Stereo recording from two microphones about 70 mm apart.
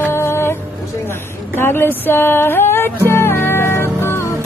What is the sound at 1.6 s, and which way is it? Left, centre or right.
Music, left.